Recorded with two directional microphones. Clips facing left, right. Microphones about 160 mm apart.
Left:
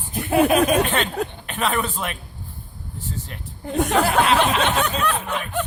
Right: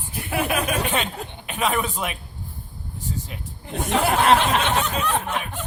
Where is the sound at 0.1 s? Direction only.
30° left (ahead or behind).